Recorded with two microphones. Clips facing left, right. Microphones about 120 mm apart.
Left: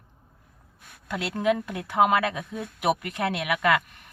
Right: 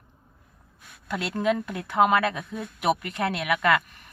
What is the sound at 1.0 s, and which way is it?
Speech, 15° left (ahead or behind).